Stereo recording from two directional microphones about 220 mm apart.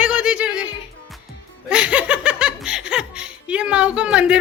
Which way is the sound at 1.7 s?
5° right (ahead or behind).